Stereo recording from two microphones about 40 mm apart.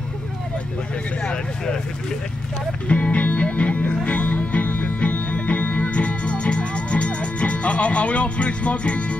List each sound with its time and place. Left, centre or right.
2.9 s music: left